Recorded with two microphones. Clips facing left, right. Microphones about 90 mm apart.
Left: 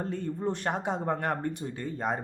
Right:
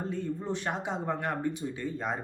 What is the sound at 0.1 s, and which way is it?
A man's voice, 50° left (ahead or behind).